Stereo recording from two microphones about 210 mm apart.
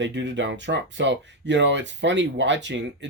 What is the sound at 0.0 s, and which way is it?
Speech, 60° right (ahead or behind).